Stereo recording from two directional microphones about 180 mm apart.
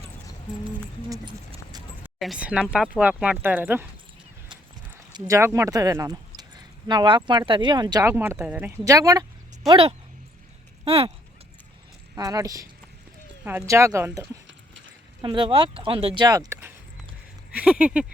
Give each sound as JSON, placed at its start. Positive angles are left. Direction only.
{"t": 2.0, "sound": "speech", "side_deg": 0}
{"t": 5.1, "sound": "speech", "side_deg": -15}
{"t": 9.6, "sound": "speech", "side_deg": -30}
{"t": 12.1, "sound": "speech", "side_deg": -20}
{"t": 14.4, "sound": "clip-clop", "side_deg": -90}
{"t": 15.2, "sound": "speech", "side_deg": -25}